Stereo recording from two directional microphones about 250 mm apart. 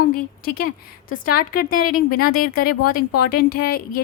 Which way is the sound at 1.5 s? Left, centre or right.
Left.